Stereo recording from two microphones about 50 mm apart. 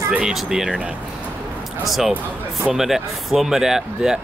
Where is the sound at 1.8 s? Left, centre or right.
Centre.